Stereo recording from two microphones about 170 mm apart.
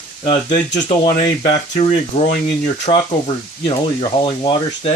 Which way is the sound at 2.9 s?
35° left (ahead or behind).